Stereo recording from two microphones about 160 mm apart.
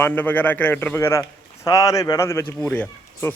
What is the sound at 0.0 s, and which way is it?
Speech, 10° left (ahead or behind).